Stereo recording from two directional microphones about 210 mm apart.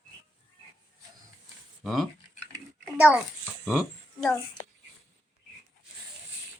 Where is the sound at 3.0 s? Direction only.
5° right (ahead or behind).